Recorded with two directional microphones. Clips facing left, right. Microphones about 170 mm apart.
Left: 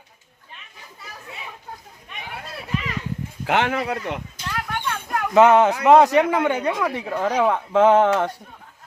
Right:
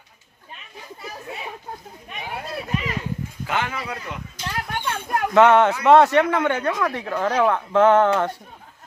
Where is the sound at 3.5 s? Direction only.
75° left (ahead or behind).